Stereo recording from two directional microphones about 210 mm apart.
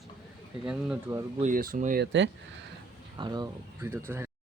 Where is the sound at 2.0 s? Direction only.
60° right (ahead or behind).